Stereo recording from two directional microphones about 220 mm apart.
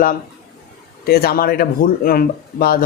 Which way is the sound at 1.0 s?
45° left (ahead or behind).